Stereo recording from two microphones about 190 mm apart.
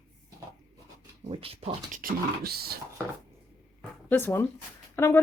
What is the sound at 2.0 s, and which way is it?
Speech, 55° right (ahead or behind).